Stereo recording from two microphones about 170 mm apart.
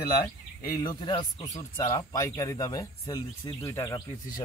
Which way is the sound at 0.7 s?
20° left (ahead or behind).